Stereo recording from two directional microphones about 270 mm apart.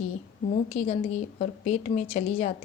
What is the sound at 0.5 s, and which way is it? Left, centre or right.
Speech, left.